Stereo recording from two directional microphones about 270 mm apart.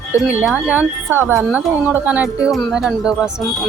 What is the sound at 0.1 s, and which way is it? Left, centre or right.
Speech, centre.